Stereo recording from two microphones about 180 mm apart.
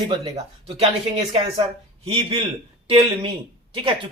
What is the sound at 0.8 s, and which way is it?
Speech, 30° right (ahead or behind).